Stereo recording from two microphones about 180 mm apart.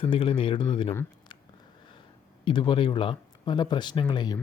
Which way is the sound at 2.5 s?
25° left (ahead or behind).